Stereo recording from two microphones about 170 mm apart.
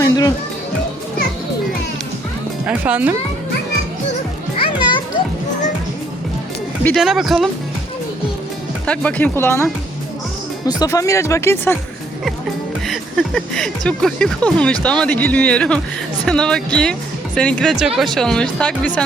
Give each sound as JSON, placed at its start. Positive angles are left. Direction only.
{"t": 0.0, "sound": "music", "side_deg": 20}
{"t": 2.6, "sound": "speech", "side_deg": -10}
{"t": 4.5, "sound": "children playing", "side_deg": 30}
{"t": 6.8, "sound": "speech", "side_deg": 0}
{"t": 8.9, "sound": "speech", "side_deg": 10}
{"t": 10.7, "sound": "speech", "side_deg": 20}
{"t": 12.9, "sound": "speech", "side_deg": 5}